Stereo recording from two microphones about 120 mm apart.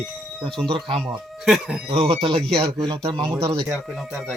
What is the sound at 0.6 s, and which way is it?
Speech, 45° right (ahead or behind).